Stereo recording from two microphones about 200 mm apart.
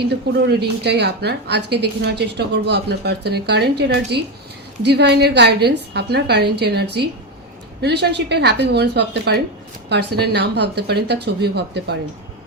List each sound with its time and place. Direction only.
0.0 s a woman's voice: 55° right (ahead or behind)